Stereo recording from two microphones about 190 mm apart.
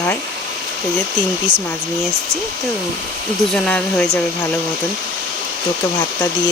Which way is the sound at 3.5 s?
5° left (ahead or behind).